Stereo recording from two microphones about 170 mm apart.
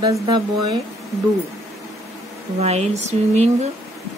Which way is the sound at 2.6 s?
40° right (ahead or behind).